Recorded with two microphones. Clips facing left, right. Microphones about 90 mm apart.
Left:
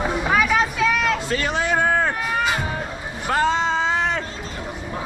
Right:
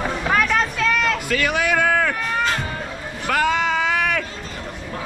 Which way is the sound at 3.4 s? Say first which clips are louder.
Even; 25° left (ahead or behind).